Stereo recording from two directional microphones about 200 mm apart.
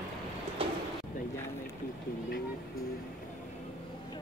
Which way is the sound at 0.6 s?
25° right (ahead or behind).